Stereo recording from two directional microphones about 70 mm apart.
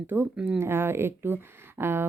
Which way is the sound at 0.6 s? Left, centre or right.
Right.